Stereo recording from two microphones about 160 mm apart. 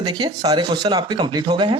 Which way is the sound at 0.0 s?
25° right (ahead or behind).